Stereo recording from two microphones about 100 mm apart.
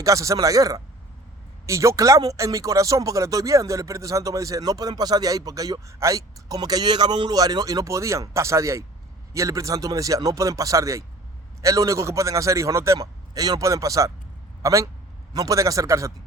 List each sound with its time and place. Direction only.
0.0 s a man's voice: 35° right (ahead or behind)